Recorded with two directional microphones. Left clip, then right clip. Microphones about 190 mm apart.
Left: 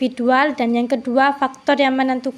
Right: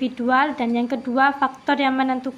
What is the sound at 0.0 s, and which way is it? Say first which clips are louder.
A woman's voice: left 3 dB; 35° left (ahead or behind).